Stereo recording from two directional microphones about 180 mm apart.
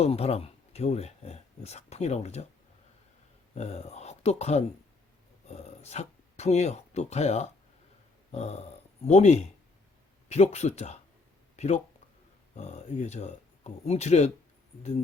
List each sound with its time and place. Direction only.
0.0 s speech: 35° left (ahead or behind)
3.5 s speech: 40° left (ahead or behind)